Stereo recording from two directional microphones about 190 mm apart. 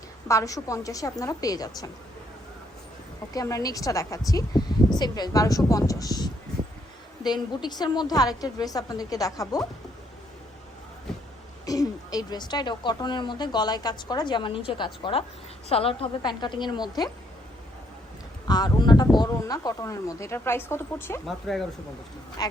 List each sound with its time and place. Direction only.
0.3 s speech: 15° left (ahead or behind)
3.3 s a woman's voice: 20° left (ahead or behind)
11.6 s a woman's voice: 20° left (ahead or behind)
18.4 s speech: 20° left (ahead or behind)
21.2 s speech: centre (ahead or behind)
22.4 s a woman's voice: 20° left (ahead or behind)